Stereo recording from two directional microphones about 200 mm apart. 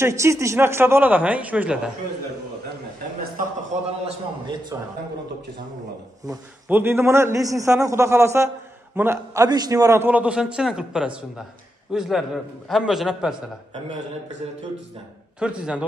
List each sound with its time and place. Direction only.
0.0 s a man's voice: 15° right (ahead or behind)
4.0 s a man's voice: 20° right (ahead or behind)
6.2 s a man's voice: 15° right (ahead or behind)
15.3 s a man's voice: 5° right (ahead or behind)